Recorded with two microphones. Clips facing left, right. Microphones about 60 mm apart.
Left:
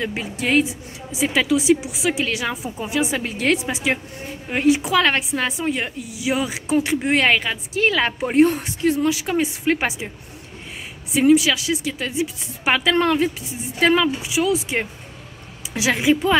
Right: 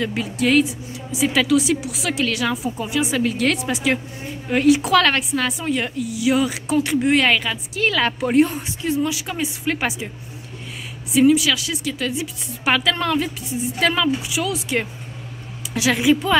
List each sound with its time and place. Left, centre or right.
0.0 s a woman's voice: left
5.1 s a woman's voice: left
8.5 s a woman's voice: left
11.1 s a woman's voice: left